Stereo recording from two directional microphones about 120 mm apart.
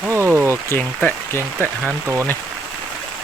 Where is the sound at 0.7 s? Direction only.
15° left (ahead or behind).